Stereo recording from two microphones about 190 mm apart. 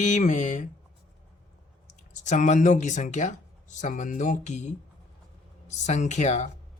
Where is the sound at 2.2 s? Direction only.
40° left (ahead or behind).